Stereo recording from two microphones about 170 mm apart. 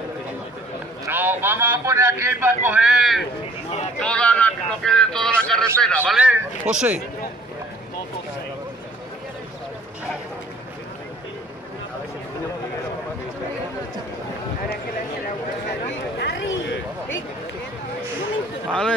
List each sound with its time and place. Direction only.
1.0 s a man's voice: 10° right (ahead or behind)
16.2 s a sound: 90° left
18.7 s speech: 5° left (ahead or behind)